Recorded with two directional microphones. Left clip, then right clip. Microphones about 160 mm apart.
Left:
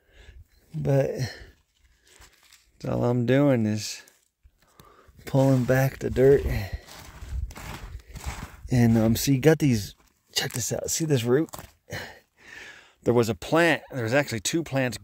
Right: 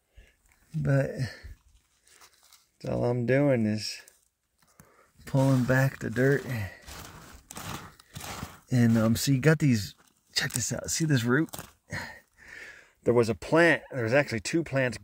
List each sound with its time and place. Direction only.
0.9 s speech: 25° left (ahead or behind)
2.8 s speech: 30° left (ahead or behind)
5.4 s speech: 20° left (ahead or behind)
8.6 s speech: 20° left (ahead or behind)
10.5 s speech: 10° left (ahead or behind)
12.4 s speech: 25° left (ahead or behind)